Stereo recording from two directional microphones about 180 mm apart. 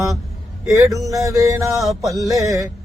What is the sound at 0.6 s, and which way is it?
Music, 15° right (ahead or behind).